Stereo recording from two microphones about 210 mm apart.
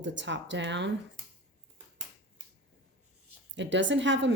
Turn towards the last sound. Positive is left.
turn(degrees=-60)  # may be behind; listen again after turning